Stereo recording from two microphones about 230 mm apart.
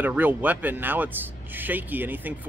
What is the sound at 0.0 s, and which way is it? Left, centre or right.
Speech, centre.